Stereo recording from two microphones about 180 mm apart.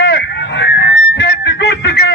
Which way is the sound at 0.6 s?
70° left (ahead or behind).